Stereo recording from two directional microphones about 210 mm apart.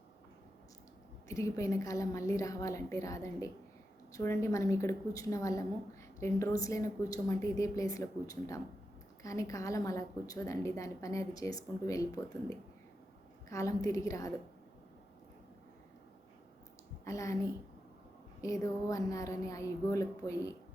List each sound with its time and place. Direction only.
1.3 s a woman's voice: 15° left (ahead or behind)
17.1 s a woman's voice: 15° left (ahead or behind)